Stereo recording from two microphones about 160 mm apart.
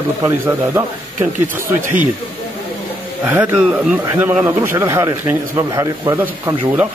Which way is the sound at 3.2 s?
15° right (ahead or behind).